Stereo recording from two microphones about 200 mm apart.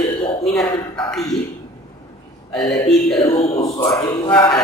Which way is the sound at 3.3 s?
30° left (ahead or behind).